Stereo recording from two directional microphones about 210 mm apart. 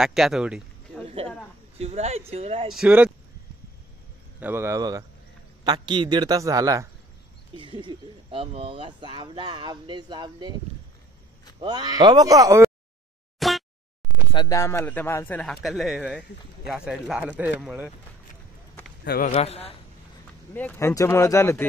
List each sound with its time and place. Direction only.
0.0 s a man's voice: centre (ahead or behind)
1.0 s a sound: 30° right (ahead or behind)
1.8 s speech: 30° right (ahead or behind)
2.7 s speech: 5° right (ahead or behind)
4.4 s speech: 10° right (ahead or behind)
11.6 s speech: 20° right (ahead or behind)
13.4 s a sound: centre (ahead or behind)
14.3 s speech: 20° left (ahead or behind); by 17.9 s 5° right (ahead or behind)
19.0 s speech: 45° left (ahead or behind)
19.3 s a man's voice: 30° left (ahead or behind)
20.5 s speech: 10° left (ahead or behind)